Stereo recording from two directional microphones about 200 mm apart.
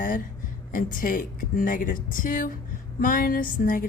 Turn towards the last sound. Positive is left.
turn(degrees=45)  # may be behind; listen again after turning